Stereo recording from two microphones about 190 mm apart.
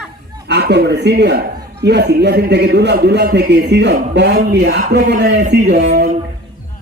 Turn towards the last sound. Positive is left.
turn(degrees=-60)  # may be behind; listen again after turning